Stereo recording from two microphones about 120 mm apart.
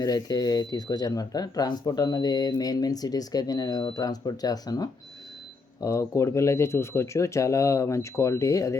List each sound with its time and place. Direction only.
0.0 s speech: 30° left (ahead or behind)